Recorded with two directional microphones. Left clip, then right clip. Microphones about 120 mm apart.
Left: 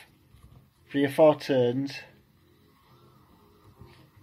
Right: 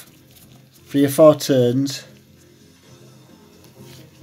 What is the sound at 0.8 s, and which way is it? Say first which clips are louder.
Speech: right 8 dB; 40° right (ahead or behind).